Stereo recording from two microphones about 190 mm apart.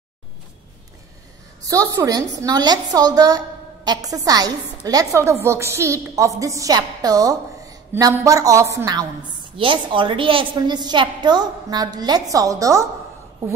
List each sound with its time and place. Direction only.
1.6 s a woman's voice: 15° right (ahead or behind)